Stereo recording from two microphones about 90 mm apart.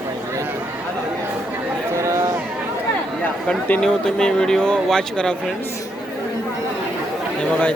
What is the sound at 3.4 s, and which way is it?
Speech, 20° left (ahead or behind).